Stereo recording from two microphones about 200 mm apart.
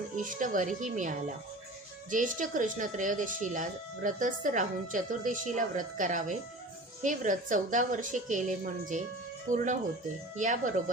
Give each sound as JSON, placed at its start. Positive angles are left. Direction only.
{"t": 0.2, "sound": "speech", "side_deg": -40}